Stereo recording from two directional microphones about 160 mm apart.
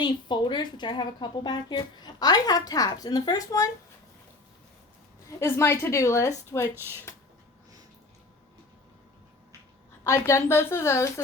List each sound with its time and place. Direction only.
0.0 s speech: 30° left (ahead or behind)
5.4 s a woman's voice: 15° left (ahead or behind)
10.0 s a woman's voice: 20° left (ahead or behind)